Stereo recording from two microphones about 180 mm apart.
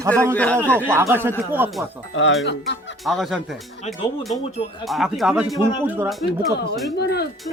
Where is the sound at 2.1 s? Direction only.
90° left.